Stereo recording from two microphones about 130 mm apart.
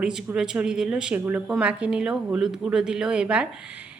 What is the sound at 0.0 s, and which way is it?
Speech, 5° right (ahead or behind).